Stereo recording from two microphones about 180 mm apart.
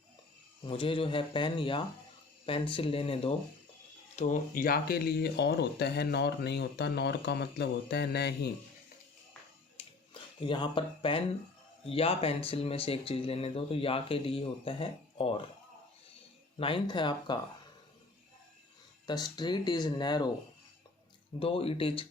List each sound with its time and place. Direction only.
0.6 s speech: 30° left (ahead or behind)
4.1 s speech: 40° left (ahead or behind); by 8.4 s 65° left (ahead or behind)
10.4 s speech: 30° left (ahead or behind)
16.6 s speech: 30° left (ahead or behind)
19.0 s speech: 25° left (ahead or behind)
21.3 s speech: 30° left (ahead or behind)